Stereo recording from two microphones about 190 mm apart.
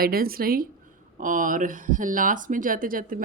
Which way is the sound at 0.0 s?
50° right (ahead or behind).